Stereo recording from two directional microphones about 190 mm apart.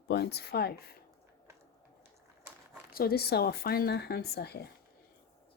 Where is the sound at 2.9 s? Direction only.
50° left (ahead or behind).